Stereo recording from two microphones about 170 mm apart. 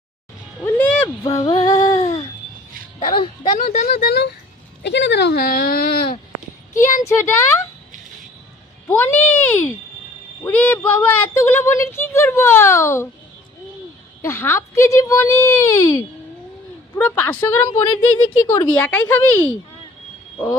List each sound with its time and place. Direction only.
0.6 s speech: 10° left (ahead or behind)
1.0 s a sound: 20° left (ahead or behind)
3.0 s speech: 30° left (ahead or behind)
3.6 s speech: 50° left (ahead or behind); by 4.3 s 65° left (ahead or behind)
4.8 s speech: 90° left; by 6.1 s 60° left (ahead or behind)
7.0 s speech: 15° left (ahead or behind)
8.9 s speech: 10° left (ahead or behind)
14.2 s speech: 15° left (ahead or behind)